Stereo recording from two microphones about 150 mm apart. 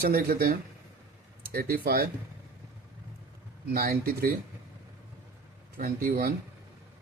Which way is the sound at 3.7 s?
80° right.